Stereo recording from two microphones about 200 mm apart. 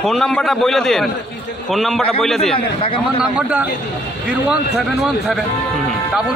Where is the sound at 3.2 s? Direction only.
5° right (ahead or behind).